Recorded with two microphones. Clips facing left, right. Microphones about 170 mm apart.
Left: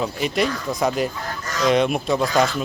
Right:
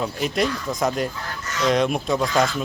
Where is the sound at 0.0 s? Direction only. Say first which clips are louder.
Left 1 dB; centre (ahead or behind).